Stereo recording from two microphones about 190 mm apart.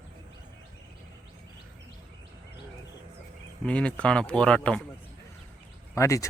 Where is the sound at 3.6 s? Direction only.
5° left (ahead or behind).